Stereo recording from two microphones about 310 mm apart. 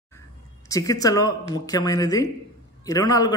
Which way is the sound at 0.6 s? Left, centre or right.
Centre.